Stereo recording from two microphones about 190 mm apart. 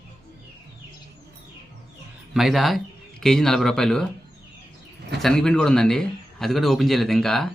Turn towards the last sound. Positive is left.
turn(degrees=0)  # may be behind; listen again after turning